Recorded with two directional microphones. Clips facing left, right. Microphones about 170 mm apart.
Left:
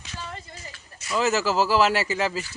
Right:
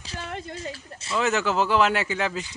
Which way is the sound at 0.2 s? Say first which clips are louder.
Right 6 dB; 65° right (ahead or behind).